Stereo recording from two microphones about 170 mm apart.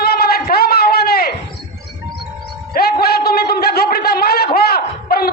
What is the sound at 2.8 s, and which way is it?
A man's voice, 65° left (ahead or behind).